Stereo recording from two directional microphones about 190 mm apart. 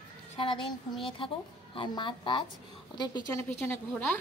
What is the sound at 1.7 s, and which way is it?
Speech, 25° left (ahead or behind).